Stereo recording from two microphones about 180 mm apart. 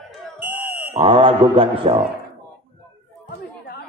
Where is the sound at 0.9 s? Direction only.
30° right (ahead or behind).